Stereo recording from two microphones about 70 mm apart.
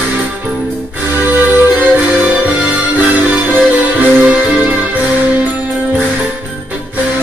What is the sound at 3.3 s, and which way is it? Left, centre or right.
Music, right.